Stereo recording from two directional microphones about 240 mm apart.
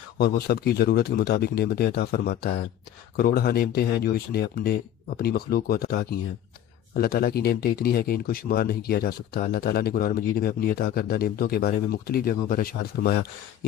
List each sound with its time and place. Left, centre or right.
0.2 s speech: left